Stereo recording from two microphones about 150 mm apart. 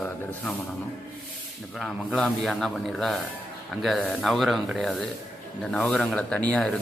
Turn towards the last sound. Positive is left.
turn(degrees=5)  # may be behind; listen again after turning